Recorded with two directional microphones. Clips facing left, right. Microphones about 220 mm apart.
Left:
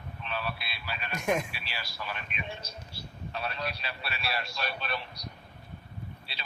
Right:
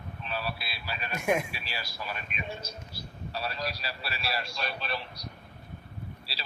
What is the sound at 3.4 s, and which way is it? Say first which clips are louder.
Speech: even; 35° right (ahead or behind).